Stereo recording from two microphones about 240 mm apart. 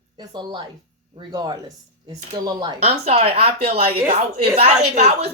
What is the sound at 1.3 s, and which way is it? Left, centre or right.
Speech, centre.